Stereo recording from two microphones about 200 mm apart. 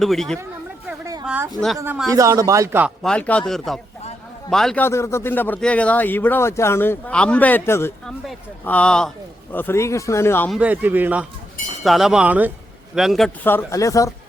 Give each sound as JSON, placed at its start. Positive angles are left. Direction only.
{"t": 0.0, "sound": "speech", "side_deg": 0}
{"t": 0.9, "sound": "a sound", "side_deg": -15}
{"t": 1.2, "sound": "a woman's voice", "side_deg": -5}
{"t": 2.0, "sound": "speech", "side_deg": -15}
{"t": 3.0, "sound": "a man's voice", "side_deg": 5}
{"t": 10.5, "sound": "a man's voice", "side_deg": -5}